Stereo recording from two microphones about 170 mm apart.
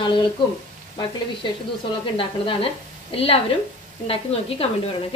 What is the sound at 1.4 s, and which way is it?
A woman's voice, 25° left (ahead or behind).